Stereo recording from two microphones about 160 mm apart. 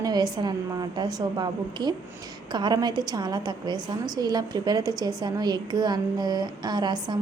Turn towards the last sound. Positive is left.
turn(degrees=-25)  # may be behind; listen again after turning